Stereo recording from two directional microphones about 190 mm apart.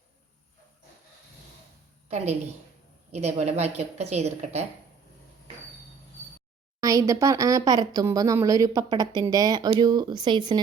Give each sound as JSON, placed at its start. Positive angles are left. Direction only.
{"t": 2.0, "sound": "a woman's voice", "side_deg": -35}
{"t": 6.7, "sound": "speech", "side_deg": -15}